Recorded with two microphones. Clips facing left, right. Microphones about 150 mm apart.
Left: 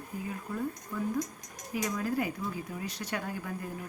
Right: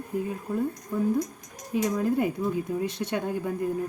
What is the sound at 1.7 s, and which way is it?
A woman's voice, 25° right (ahead or behind).